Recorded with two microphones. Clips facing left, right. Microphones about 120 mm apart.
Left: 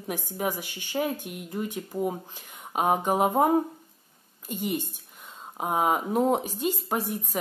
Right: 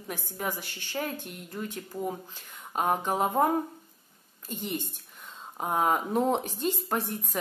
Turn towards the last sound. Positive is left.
turn(degrees=5)  # may be behind; listen again after turning